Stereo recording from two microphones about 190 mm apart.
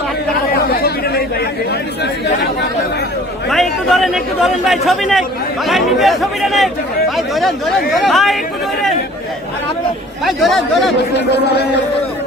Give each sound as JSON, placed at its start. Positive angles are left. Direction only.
{"t": 0.8, "sound": "chatter", "side_deg": 55}
{"t": 3.5, "sound": "speech", "side_deg": 0}
{"t": 10.2, "sound": "speech", "side_deg": 0}